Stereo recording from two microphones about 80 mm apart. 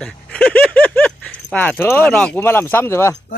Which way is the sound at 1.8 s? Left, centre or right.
Left.